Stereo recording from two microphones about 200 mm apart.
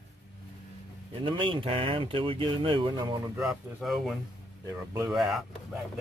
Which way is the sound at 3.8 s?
Centre (ahead or behind).